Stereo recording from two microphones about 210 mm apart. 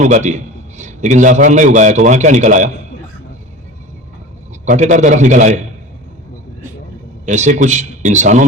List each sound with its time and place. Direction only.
0.0 s a man's voice: 35° right (ahead or behind)
4.6 s speech: 35° right (ahead or behind)
7.3 s speech: 35° right (ahead or behind)